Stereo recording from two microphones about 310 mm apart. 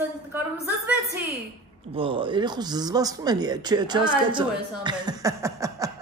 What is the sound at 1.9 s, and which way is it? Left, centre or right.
Speech, centre.